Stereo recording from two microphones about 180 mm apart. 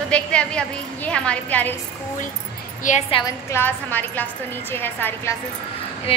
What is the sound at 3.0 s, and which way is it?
Speech, 30° left (ahead or behind).